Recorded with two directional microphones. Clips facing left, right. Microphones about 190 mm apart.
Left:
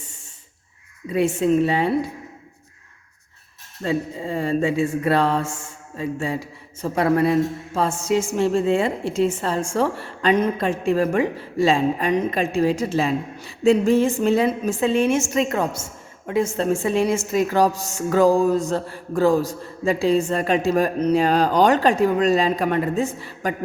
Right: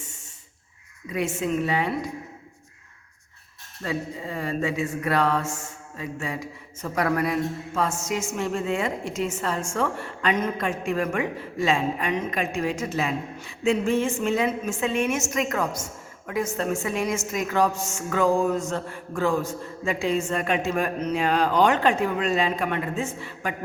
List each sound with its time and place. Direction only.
1.1 s a man's voice: 30° left (ahead or behind)
3.8 s a sound: 30° left (ahead or behind)
6.0 s a man's voice: 30° left (ahead or behind)